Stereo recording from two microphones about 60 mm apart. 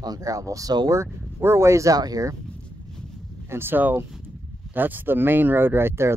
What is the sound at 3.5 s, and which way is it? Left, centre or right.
Speech, right.